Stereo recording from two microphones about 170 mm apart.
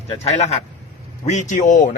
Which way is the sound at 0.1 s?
40° left (ahead or behind).